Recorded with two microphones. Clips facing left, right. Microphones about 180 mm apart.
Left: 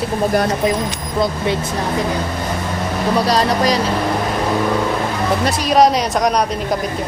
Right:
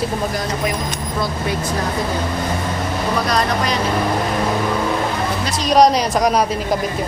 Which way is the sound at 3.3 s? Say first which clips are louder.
Left 3 dB; 35° left (ahead or behind).